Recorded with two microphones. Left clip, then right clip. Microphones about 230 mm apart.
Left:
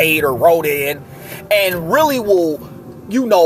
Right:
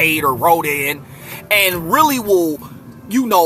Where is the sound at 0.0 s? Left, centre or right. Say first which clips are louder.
Left 2 dB; centre.